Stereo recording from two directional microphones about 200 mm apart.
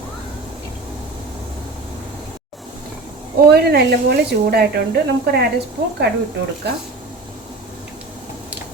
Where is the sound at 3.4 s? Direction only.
55° right (ahead or behind).